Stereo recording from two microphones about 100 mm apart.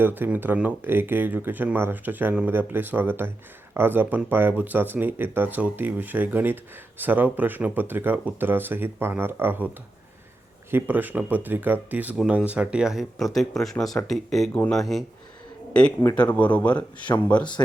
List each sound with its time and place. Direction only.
0.0 s speech: 20° right (ahead or behind)
10.7 s speech: 20° right (ahead or behind); by 14.5 s centre (ahead or behind)
14.5 s speech: 15° left (ahead or behind)
14.8 s speech: centre (ahead or behind)